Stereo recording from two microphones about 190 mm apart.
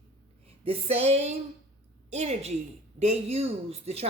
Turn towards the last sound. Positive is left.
turn(degrees=-35)  # may be behind; listen again after turning